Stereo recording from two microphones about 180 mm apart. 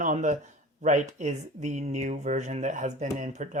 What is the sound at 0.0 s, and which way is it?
Speech, 45° right (ahead or behind).